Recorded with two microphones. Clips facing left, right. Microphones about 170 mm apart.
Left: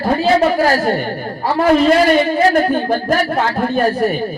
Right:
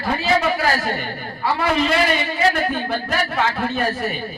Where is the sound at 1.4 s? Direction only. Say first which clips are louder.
Left 8 dB; 45° left (ahead or behind).